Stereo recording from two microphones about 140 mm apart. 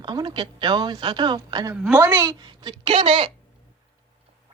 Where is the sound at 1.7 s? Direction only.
10° right (ahead or behind).